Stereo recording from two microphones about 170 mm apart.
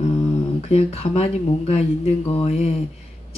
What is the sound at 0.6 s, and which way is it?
Speech, 35° left (ahead or behind).